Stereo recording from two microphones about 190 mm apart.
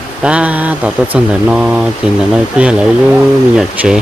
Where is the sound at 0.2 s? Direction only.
5° right (ahead or behind).